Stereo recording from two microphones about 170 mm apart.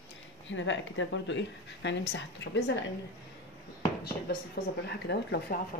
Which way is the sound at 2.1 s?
75° left (ahead or behind).